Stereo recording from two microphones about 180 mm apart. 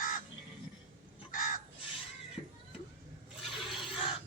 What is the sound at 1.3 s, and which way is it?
Crow, 50° left (ahead or behind).